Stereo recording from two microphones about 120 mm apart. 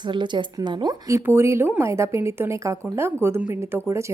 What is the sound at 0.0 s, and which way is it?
Speech, 40° right (ahead or behind).